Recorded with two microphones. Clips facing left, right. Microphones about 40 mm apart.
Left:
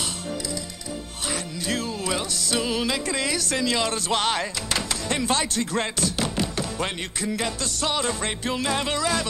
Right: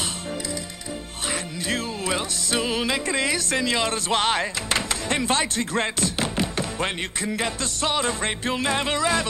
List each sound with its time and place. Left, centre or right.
1.7 s music: right